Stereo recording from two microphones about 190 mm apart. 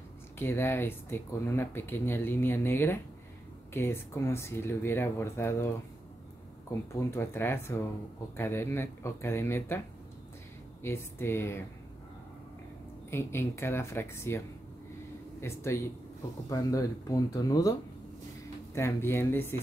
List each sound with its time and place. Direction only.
0.4 s speech: 10° left (ahead or behind)
6.9 s speech: 15° left (ahead or behind)
10.8 s speech: 15° left (ahead or behind)
13.1 s speech: 15° left (ahead or behind)
15.4 s speech: 15° left (ahead or behind)
18.8 s speech: 15° left (ahead or behind)